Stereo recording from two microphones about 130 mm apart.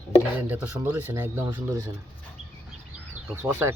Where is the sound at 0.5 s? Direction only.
15° right (ahead or behind).